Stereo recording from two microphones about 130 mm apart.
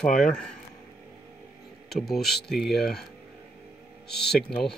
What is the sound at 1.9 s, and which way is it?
Speech, centre (ahead or behind).